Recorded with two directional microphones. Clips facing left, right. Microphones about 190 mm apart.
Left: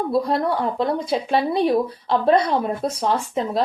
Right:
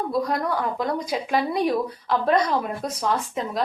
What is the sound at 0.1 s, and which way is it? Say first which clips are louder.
A woman's voice: left 4 dB; 30° left (ahead or behind).